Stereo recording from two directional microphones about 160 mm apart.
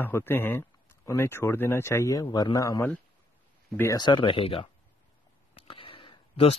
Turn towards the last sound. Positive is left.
turn(degrees=35)  # may be behind; listen again after turning